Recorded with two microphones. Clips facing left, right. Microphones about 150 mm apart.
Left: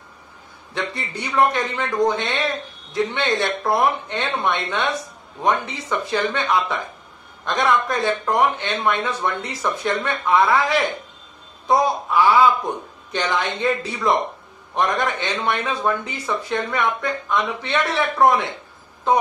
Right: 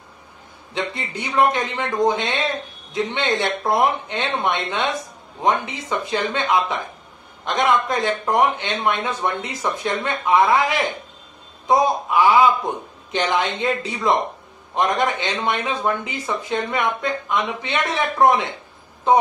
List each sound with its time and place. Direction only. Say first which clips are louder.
0.7 s a man's voice: right 1 dB; 20° right (ahead or behind)